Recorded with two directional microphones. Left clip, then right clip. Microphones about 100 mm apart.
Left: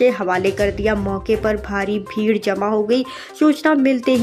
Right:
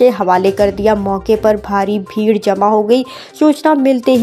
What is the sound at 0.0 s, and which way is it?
Speech, 35° right (ahead or behind).